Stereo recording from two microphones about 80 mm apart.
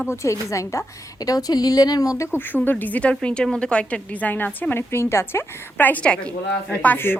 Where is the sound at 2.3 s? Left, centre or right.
Left.